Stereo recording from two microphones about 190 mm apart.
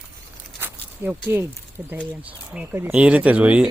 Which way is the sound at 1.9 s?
5° right (ahead or behind).